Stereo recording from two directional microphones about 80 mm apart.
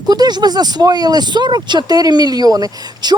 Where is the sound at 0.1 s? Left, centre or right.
Right.